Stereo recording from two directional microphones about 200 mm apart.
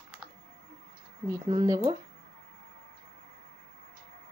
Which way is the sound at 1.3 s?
15° right (ahead or behind).